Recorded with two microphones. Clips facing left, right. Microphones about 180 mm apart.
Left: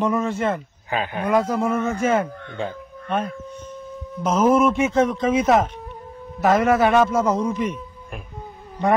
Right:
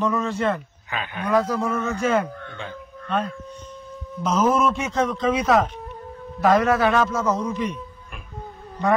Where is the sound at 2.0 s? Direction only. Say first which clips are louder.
Left 1 dB; 10° left (ahead or behind).